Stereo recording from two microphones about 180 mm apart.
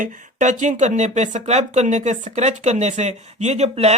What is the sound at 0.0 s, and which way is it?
Speech, 45° right (ahead or behind).